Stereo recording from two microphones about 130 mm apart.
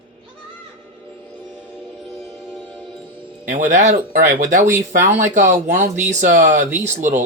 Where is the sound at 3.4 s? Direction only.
80° right.